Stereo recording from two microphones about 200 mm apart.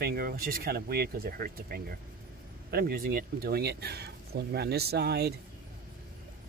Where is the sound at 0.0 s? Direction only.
50° right (ahead or behind).